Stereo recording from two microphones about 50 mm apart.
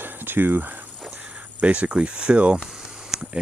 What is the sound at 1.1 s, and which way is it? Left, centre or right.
Speech, right.